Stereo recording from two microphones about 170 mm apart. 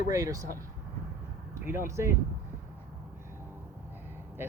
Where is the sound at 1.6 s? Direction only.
15° right (ahead or behind).